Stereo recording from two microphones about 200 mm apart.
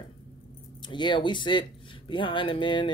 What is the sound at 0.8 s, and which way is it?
Speech, 20° left (ahead or behind).